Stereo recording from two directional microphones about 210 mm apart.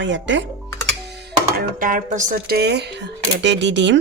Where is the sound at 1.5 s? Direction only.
40° right (ahead or behind); by 4.0 s 60° right (ahead or behind).